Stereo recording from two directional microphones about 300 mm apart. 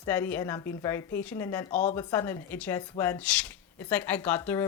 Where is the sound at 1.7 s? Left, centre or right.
Left.